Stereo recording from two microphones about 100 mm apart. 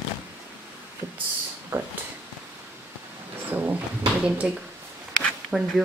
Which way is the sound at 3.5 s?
20° right (ahead or behind).